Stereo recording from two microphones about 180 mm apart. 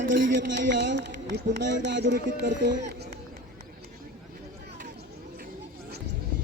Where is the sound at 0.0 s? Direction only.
80° right.